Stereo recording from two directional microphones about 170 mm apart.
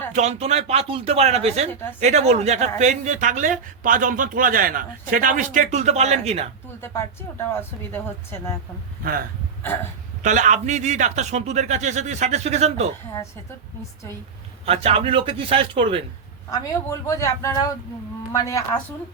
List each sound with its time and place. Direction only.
0.1 s a woman's voice: 40° right (ahead or behind)
7.9 s speech: 15° left (ahead or behind)
10.2 s a woman's voice: 45° right (ahead or behind)
14.6 s speech: 35° right (ahead or behind)
16.5 s speech: 20° left (ahead or behind)